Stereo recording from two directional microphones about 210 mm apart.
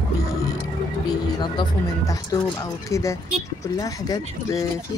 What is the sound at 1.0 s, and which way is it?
Speech, 20° left (ahead or behind).